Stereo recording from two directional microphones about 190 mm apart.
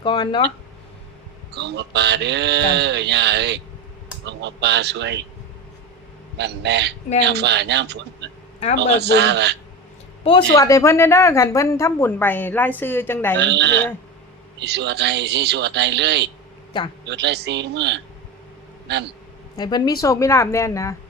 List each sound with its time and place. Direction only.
0.0 s speech: 25° left (ahead or behind)
1.5 s speech: 65° right (ahead or behind)
6.3 s speech: 65° right (ahead or behind)
10.5 s a woman's voice: 15° left (ahead or behind)
13.4 s speech: 65° right (ahead or behind)
19.5 s a woman's voice: 20° left (ahead or behind)